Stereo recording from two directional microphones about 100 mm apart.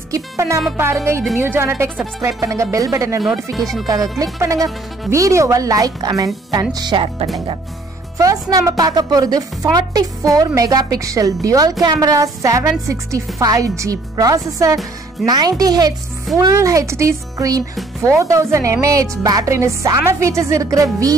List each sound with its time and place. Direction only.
0.1 s a woman's voice: 30° right (ahead or behind)
0.7 s music: 25° right (ahead or behind)
1.8 s a woman's voice: 25° right (ahead or behind)
3.5 s speech: centre (ahead or behind)
3.8 s a woman's voice: 40° right (ahead or behind)
8.2 s a woman's voice: 35° right (ahead or behind)